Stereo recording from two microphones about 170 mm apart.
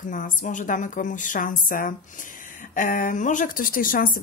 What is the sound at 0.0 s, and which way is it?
A woman's voice, 50° left (ahead or behind).